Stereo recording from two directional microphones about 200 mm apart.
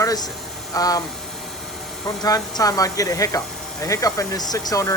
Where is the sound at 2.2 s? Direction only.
20° left (ahead or behind).